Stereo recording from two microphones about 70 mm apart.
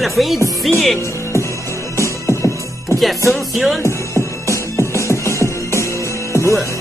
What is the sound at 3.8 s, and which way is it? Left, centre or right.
Music, left.